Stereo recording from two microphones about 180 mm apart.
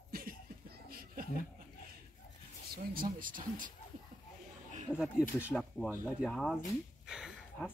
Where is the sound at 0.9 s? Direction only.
55° right (ahead or behind).